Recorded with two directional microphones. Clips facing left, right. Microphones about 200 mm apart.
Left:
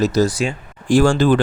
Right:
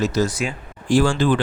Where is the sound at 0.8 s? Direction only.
45° left (ahead or behind).